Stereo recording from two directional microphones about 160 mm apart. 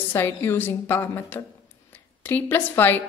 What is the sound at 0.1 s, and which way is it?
A woman's voice, 15° left (ahead or behind).